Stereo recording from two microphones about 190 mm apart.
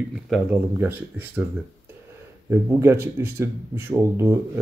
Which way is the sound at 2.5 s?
15° right (ahead or behind).